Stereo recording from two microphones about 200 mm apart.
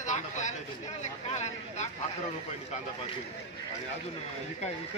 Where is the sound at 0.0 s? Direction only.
35° left (ahead or behind).